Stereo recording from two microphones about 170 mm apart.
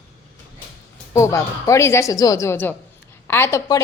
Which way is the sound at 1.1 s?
15° left (ahead or behind).